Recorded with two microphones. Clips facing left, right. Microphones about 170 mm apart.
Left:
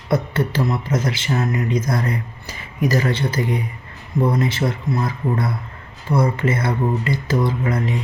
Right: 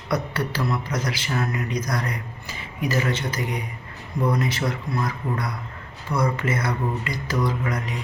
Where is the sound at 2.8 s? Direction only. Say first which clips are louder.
Left 5 dB; 40° left (ahead or behind).